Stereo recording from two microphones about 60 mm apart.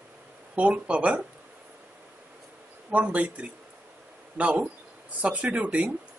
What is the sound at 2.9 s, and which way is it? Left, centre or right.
Speech, right.